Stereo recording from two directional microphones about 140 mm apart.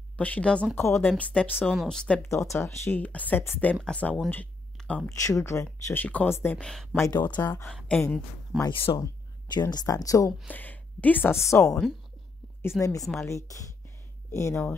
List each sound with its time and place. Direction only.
0.2 s speech: 10° left (ahead or behind)
1.6 s speech: centre (ahead or behind)
2.2 s speech: 20° left (ahead or behind)
5.1 s speech: 20° left (ahead or behind)
6.7 s speech: centre (ahead or behind)
7.0 s speech: 30° left (ahead or behind)
7.6 s speech: 5° left (ahead or behind)
8.9 s speech: 30° left (ahead or behind)
10.5 s a woman's voice: 10° left (ahead or behind)
13.5 s a sound: 20° left (ahead or behind)